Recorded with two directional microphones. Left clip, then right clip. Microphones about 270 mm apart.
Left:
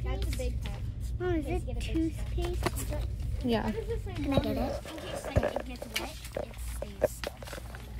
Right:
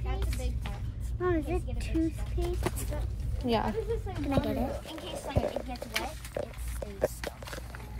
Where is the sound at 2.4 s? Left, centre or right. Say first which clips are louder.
Even; centre.